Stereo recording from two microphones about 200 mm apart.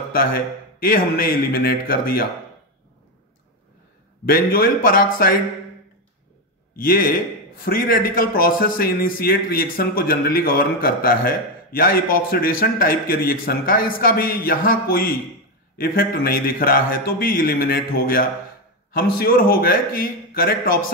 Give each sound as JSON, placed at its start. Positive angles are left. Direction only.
{"t": 0.1, "sound": "a man's voice", "side_deg": 45}
{"t": 4.3, "sound": "a man's voice", "side_deg": 50}
{"t": 6.8, "sound": "a man's voice", "side_deg": 45}